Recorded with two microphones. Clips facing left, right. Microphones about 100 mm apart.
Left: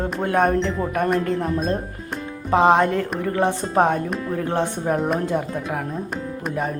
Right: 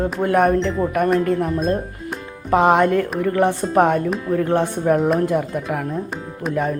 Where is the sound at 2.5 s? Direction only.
25° left (ahead or behind).